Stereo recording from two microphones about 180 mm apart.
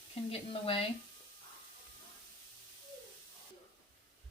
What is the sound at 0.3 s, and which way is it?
Speech, 30° left (ahead or behind).